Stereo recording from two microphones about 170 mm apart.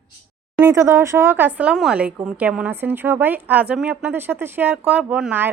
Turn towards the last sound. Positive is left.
turn(degrees=-10)  # may be behind; listen again after turning